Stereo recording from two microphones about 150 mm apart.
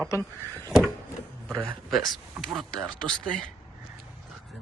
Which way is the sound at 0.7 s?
Centre (ahead or behind).